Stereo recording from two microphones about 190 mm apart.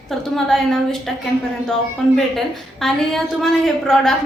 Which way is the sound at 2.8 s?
Centre (ahead or behind).